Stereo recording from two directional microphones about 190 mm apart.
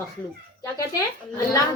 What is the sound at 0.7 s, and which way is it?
Speech, 15° left (ahead or behind).